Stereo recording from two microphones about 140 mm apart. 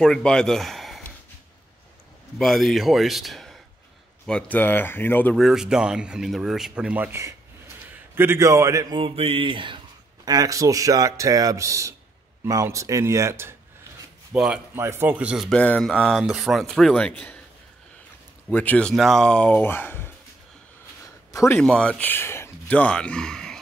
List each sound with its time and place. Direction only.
0.0 s speech: 5° left (ahead or behind)
2.3 s speech: centre (ahead or behind)
5.3 s speech: centre (ahead or behind); by 8.8 s 20° right (ahead or behind)
8.9 s speech: 40° right (ahead or behind); by 13.6 s 20° right (ahead or behind)
14.3 s speech: 10° right (ahead or behind); by 17.4 s 10° left (ahead or behind)
18.5 s speech: 10° left (ahead or behind)
21.3 s a sound: 25° left (ahead or behind)
21.5 s speech: 5° left (ahead or behind)